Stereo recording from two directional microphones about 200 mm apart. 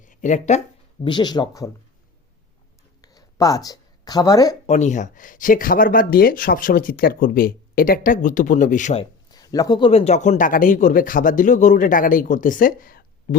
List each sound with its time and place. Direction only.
0.0 s speech: 40° left (ahead or behind)
1.0 s speech: 20° left (ahead or behind)
3.0 s a sound: 20° left (ahead or behind)
4.6 s speech: 35° left (ahead or behind)
9.3 s speech: 20° left (ahead or behind); by 13.0 s 45° left (ahead or behind)